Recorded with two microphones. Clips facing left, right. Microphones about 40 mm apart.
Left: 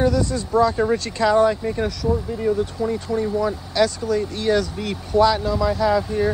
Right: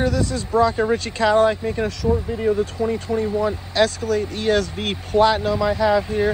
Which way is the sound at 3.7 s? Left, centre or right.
Right.